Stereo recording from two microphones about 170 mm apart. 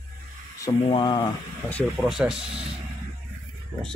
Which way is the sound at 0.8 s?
30° left (ahead or behind).